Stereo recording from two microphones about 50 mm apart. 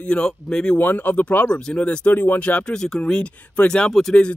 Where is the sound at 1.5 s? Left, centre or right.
Left.